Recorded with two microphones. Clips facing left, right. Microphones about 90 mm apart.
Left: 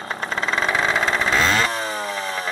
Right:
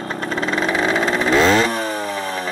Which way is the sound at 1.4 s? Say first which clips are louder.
Right 7 dB; 20° right (ahead or behind).